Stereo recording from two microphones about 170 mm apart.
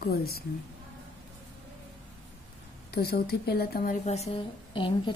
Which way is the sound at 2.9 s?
65° left (ahead or behind).